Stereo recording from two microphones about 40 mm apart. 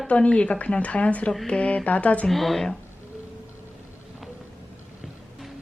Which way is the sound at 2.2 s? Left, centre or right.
Centre.